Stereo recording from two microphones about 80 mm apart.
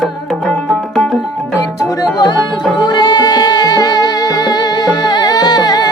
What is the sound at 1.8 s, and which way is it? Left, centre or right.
Music, left.